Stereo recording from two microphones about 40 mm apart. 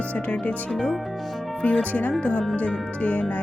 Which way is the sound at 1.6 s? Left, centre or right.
Left.